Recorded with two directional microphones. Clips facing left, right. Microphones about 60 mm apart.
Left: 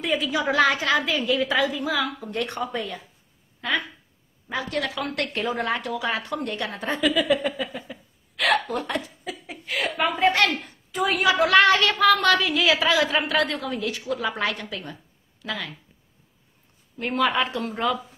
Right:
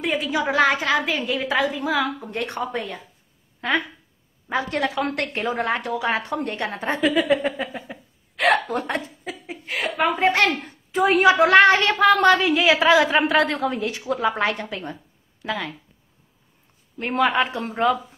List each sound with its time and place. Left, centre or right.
0.2 s a woman's voice: right
17.2 s a woman's voice: right